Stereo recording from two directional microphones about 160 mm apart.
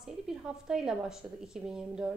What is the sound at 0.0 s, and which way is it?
A woman's voice, 5° right (ahead or behind).